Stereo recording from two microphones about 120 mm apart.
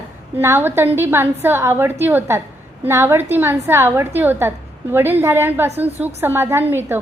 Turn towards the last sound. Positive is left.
turn(degrees=-20)  # may be behind; listen again after turning